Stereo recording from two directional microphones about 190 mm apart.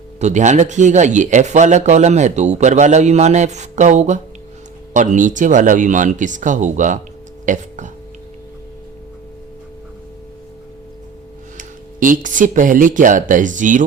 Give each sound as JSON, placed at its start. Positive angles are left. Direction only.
{"t": 0.2, "sound": "a man's voice", "side_deg": -40}
{"t": 7.4, "sound": "a sound", "side_deg": -40}
{"t": 11.5, "sound": "speech", "side_deg": -45}